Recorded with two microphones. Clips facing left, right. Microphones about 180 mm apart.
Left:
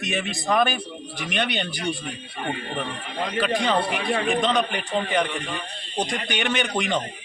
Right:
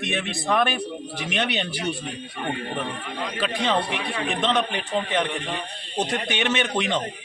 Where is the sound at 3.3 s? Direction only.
Centre (ahead or behind).